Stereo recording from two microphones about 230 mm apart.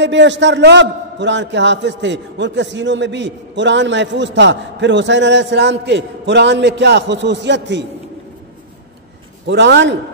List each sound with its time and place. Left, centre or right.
0.0 s a man's voice: right
9.5 s a man's voice: right